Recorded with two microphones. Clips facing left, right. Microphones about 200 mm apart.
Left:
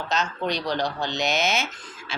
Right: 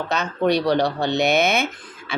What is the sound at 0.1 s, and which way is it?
A child's voice, 60° right (ahead or behind).